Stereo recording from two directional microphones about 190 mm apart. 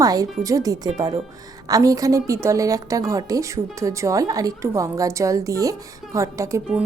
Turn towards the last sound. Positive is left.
turn(degrees=-15)  # may be behind; listen again after turning